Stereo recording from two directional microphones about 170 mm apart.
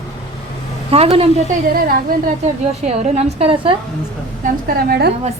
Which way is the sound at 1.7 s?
60° right (ahead or behind).